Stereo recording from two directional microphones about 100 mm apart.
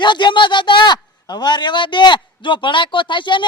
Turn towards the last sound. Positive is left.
turn(degrees=55)  # may be behind; listen again after turning